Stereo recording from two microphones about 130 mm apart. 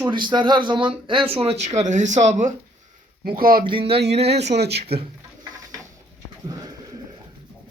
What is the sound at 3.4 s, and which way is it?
Speech, 90° right.